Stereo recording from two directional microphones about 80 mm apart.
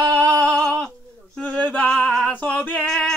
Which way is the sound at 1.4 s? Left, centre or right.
Centre.